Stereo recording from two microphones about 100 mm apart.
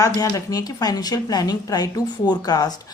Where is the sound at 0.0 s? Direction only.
35° left (ahead or behind).